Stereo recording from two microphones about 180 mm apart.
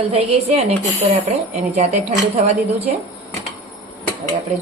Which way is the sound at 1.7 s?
40° right (ahead or behind).